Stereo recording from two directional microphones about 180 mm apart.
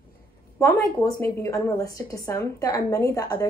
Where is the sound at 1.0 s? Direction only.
15° left (ahead or behind).